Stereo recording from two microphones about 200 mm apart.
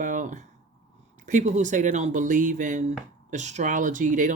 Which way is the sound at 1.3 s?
35° right (ahead or behind).